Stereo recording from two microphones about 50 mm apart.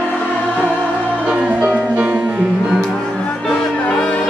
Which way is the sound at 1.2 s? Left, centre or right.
Right.